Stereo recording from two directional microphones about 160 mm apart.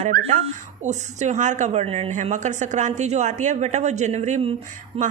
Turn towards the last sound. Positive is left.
turn(degrees=-35)  # may be behind; listen again after turning